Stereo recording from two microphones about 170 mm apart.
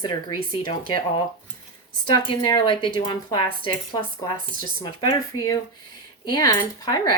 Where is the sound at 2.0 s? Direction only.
30° left (ahead or behind).